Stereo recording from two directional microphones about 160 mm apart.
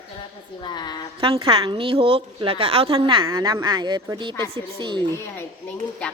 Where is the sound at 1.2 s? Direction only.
35° right (ahead or behind).